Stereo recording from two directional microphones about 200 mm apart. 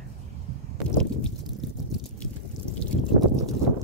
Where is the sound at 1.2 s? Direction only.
Centre (ahead or behind).